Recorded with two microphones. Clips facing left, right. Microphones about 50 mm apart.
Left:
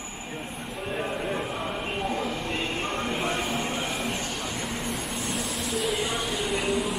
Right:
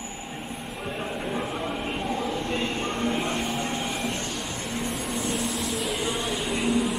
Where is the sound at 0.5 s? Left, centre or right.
Centre.